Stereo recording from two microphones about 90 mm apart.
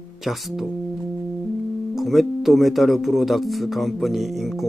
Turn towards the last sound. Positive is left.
turn(degrees=0)  # may be behind; listen again after turning